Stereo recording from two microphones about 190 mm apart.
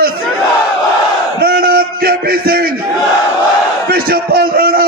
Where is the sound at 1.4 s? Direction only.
50° right (ahead or behind).